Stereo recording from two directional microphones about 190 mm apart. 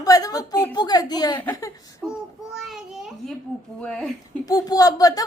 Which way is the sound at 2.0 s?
Centre (ahead or behind).